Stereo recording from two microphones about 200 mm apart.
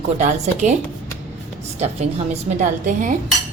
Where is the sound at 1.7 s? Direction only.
35° right (ahead or behind).